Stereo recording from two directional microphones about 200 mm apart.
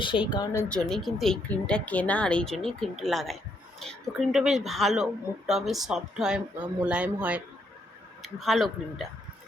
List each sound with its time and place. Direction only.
0.0 s speech: 25° left (ahead or behind)
0.7 s speech: centre (ahead or behind)